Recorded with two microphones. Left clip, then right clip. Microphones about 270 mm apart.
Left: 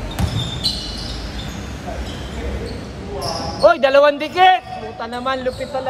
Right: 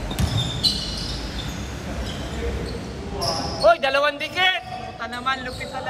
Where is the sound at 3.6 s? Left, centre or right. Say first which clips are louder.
Left 6 dB; left.